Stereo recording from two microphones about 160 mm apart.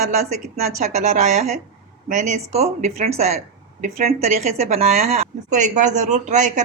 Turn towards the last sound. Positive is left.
turn(degrees=-50)  # may be behind; listen again after turning